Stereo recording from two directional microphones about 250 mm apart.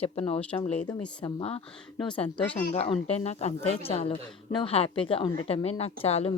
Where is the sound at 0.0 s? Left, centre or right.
Left.